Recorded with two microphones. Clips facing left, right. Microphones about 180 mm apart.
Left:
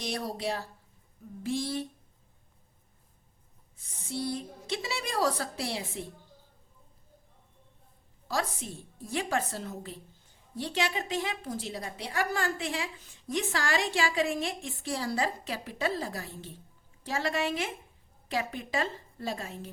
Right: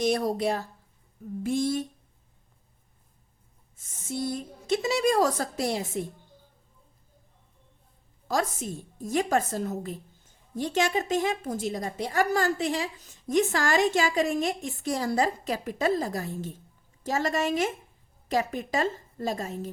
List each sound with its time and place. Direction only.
0.0 s a woman's voice: 50° right (ahead or behind)
3.8 s a woman's voice: 45° right (ahead or behind)
8.3 s a woman's voice: 45° right (ahead or behind)